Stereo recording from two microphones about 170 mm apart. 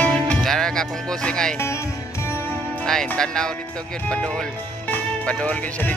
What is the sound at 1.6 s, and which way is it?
Music, 15° left (ahead or behind).